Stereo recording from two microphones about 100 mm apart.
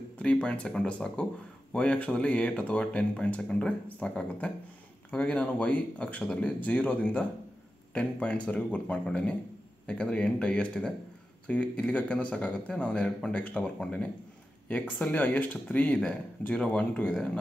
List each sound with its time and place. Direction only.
0.2 s speech: 10° left (ahead or behind)